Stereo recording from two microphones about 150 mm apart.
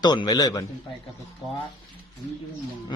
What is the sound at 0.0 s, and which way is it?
Speech, 30° left (ahead or behind).